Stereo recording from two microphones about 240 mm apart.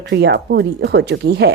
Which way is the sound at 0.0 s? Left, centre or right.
Right.